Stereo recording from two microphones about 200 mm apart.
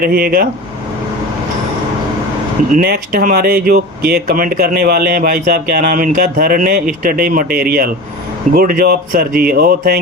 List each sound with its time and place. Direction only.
0.0 s speech: 45° right (ahead or behind)
2.6 s speech: 45° right (ahead or behind)